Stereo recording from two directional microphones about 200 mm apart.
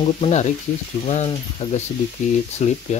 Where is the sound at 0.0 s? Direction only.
35° left (ahead or behind).